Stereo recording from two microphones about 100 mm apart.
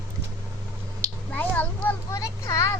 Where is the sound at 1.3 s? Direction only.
15° left (ahead or behind).